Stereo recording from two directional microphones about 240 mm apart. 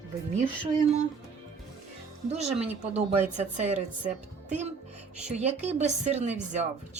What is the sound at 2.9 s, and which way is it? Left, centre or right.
Speech, right.